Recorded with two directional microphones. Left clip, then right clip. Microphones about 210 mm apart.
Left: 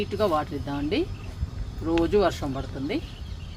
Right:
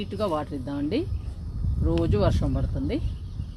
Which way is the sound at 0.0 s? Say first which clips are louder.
Left 3 dB; 35° right (ahead or behind).